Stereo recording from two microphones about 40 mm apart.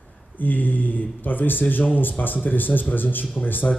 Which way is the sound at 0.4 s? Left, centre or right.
Left.